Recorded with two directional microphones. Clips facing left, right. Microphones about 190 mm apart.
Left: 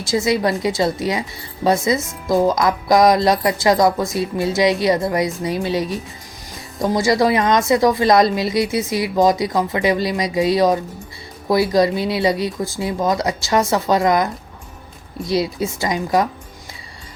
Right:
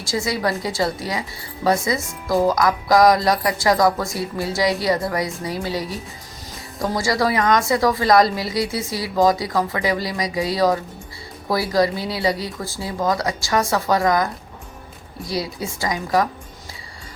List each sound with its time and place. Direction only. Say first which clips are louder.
0.0 s speech: left 5 dB; 20° left (ahead or behind)
15.3 s speech: left 6 dB; 25° left (ahead or behind)